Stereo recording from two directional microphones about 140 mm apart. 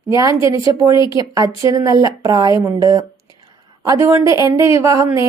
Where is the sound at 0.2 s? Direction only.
25° right (ahead or behind).